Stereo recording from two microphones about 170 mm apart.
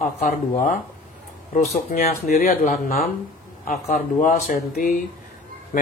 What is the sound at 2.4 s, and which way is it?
Speech, 50° left (ahead or behind).